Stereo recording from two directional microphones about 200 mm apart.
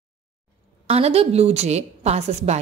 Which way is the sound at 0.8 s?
30° right (ahead or behind).